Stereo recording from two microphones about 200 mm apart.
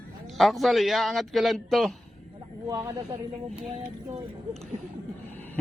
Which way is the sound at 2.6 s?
20° right (ahead or behind).